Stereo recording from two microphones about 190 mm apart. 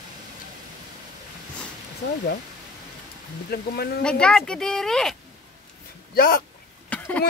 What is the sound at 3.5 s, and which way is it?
Speech, 55° left (ahead or behind).